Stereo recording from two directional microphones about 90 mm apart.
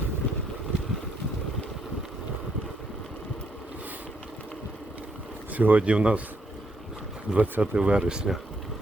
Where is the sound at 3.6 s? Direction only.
15° right (ahead or behind).